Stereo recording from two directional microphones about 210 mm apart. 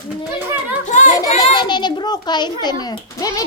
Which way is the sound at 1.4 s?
20° left (ahead or behind).